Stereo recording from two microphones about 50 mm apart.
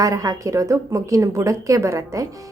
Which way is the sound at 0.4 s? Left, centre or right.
Right.